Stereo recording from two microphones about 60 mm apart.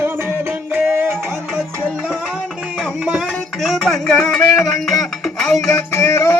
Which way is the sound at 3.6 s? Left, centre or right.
Centre.